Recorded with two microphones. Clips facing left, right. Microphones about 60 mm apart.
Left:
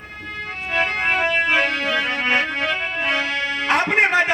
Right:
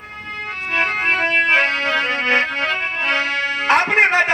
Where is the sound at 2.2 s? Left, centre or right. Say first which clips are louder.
Right 2 dB; right.